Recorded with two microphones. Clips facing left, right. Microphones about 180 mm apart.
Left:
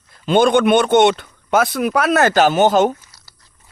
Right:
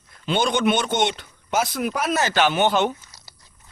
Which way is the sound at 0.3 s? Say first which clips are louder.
Left 8 dB; 55° left (ahead or behind).